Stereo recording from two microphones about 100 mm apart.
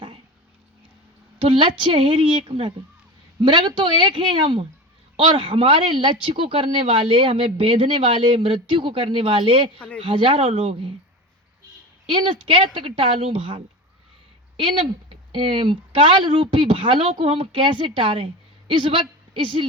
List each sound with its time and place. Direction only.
1.4 s speech: 60° right (ahead or behind)
9.7 s speech: 10° left (ahead or behind)
10.0 s speech: 60° right (ahead or behind)
12.1 s a woman's voice: 60° right (ahead or behind)